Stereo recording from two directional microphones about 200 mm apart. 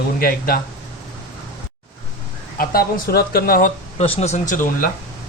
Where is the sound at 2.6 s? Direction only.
50° left (ahead or behind).